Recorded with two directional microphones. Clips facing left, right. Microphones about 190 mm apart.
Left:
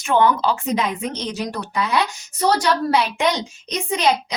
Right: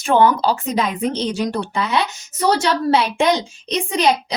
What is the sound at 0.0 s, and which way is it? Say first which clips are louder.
A woman's voice: right 2 dB; 35° right (ahead or behind).